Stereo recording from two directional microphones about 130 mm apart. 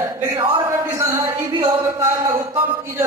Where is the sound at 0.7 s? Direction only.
20° right (ahead or behind).